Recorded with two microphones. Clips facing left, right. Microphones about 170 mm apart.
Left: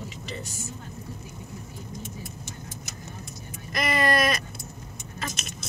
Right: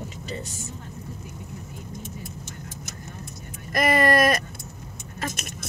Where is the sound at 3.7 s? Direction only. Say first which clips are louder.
Right 4 dB; 45° right (ahead or behind).